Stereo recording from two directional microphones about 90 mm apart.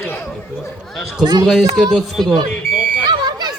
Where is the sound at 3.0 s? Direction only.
50° right (ahead or behind).